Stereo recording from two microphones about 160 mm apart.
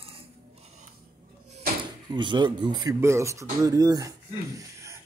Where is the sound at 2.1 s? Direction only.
30° right (ahead or behind).